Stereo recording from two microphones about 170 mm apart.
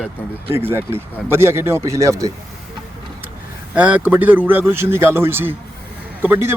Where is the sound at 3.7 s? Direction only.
10° right (ahead or behind).